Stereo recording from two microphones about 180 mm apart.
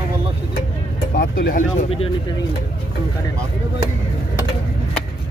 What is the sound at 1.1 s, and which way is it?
Speech, 55° left (ahead or behind).